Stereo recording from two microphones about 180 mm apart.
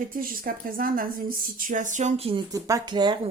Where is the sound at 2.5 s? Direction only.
20° right (ahead or behind).